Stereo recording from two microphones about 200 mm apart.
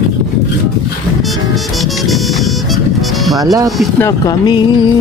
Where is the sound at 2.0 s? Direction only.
Centre (ahead or behind).